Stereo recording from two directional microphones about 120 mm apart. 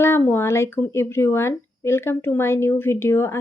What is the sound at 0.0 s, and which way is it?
Speech, 20° left (ahead or behind).